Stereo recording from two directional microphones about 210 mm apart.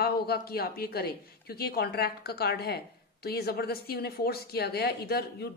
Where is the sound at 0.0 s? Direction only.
50° left (ahead or behind).